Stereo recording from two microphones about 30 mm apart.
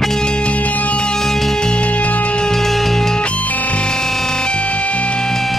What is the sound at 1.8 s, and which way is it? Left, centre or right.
Music, left.